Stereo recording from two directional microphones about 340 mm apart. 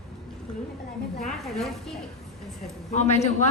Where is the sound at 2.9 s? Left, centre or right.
Centre.